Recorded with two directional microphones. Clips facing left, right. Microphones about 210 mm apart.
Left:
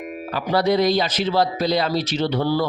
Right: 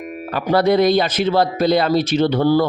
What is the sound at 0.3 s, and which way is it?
Speech, 55° right (ahead or behind).